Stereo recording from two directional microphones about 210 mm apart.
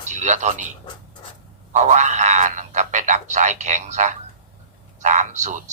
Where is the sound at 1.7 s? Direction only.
35° right (ahead or behind).